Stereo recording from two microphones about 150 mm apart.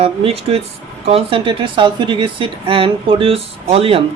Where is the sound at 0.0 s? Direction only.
40° right (ahead or behind).